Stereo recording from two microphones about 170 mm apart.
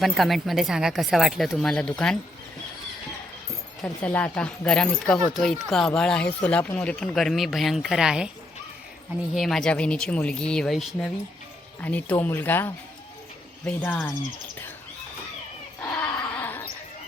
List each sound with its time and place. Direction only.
0.0 s speech: centre (ahead or behind)
3.8 s speech: 5° left (ahead or behind)
9.3 s speech: centre (ahead or behind)
15.8 s dog: 20° left (ahead or behind)
16.3 s mouse: 10° left (ahead or behind)